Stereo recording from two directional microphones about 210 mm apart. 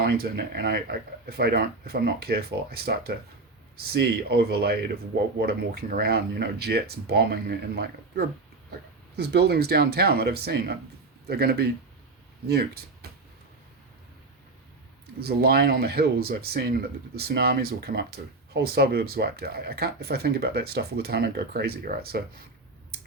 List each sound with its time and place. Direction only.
0.0 s speech: 50° right (ahead or behind)
15.2 s speech: 50° right (ahead or behind)